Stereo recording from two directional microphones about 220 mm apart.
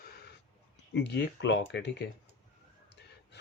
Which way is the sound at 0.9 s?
50° left (ahead or behind).